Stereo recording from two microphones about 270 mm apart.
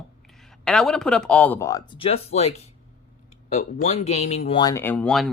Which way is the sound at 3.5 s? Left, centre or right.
Left.